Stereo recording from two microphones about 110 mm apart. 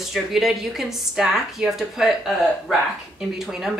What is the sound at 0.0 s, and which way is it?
Speech, centre (ahead or behind).